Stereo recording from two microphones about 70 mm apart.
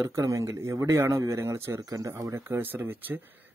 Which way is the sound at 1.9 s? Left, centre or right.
Right.